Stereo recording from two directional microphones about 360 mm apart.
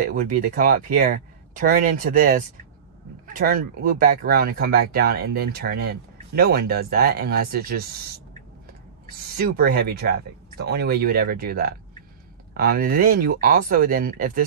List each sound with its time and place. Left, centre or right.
0.0 s speech: right
9.4 s speech: right